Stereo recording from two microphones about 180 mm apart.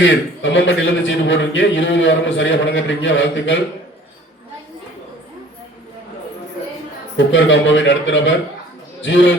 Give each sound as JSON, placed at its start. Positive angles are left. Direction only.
{"t": 0.0, "sound": "a man's voice", "side_deg": 85}
{"t": 7.3, "sound": "a man's voice", "side_deg": 90}